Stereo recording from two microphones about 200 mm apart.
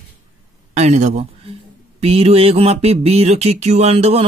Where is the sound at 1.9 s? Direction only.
30° right (ahead or behind).